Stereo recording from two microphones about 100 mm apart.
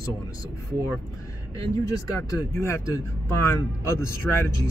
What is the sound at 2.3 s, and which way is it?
Speech, 30° left (ahead or behind).